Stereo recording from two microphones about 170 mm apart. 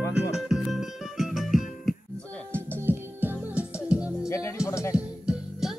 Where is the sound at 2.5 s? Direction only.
15° right (ahead or behind).